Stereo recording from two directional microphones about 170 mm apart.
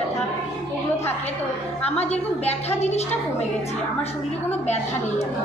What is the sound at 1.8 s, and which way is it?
A woman's voice, 35° left (ahead or behind).